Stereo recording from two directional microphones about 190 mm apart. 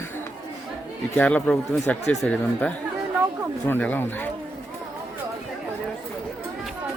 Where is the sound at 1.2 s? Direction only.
5° left (ahead or behind).